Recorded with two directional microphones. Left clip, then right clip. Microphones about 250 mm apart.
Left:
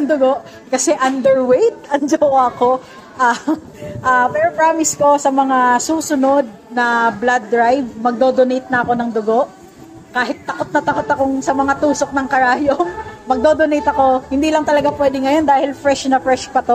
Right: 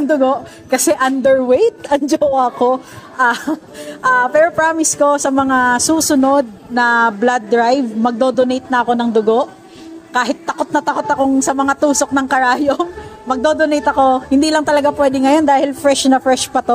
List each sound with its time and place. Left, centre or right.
0.1 s speech: right